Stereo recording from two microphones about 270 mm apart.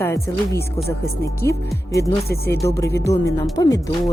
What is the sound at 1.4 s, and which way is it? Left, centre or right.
Speech, centre.